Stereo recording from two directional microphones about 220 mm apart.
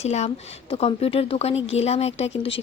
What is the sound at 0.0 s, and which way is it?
A woman's voice, 30° left (ahead or behind).